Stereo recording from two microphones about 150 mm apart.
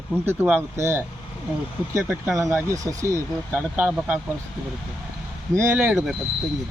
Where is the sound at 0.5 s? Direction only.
15° right (ahead or behind).